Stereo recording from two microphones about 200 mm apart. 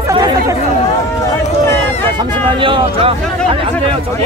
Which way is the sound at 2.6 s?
25° right (ahead or behind).